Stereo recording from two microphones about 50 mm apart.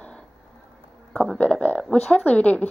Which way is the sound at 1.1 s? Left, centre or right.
Centre.